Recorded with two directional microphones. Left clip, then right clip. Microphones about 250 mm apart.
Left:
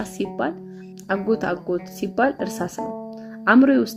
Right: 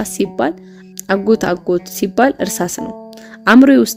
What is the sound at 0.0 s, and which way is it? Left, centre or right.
Speech, right.